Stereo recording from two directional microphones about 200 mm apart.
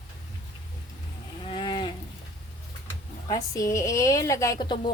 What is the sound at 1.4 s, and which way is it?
Cattle, 25° left (ahead or behind).